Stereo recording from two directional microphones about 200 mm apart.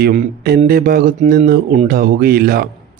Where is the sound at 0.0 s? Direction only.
45° right (ahead or behind).